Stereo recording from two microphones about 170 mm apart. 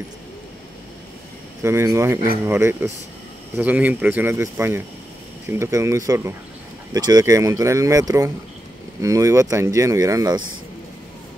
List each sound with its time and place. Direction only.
1.6 s speech: 15° right (ahead or behind)